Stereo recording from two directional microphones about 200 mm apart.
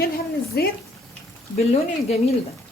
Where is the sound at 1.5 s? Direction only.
30° left (ahead or behind).